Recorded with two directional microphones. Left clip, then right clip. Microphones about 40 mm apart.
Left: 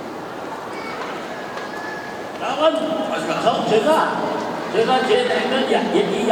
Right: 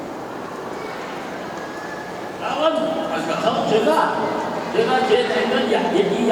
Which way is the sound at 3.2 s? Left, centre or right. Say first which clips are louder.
Left 2 dB; centre.